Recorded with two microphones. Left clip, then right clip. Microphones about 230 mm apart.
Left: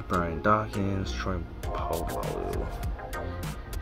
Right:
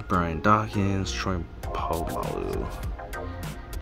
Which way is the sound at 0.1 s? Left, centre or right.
Right.